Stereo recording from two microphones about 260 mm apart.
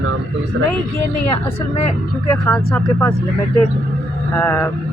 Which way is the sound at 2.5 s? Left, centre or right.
Centre.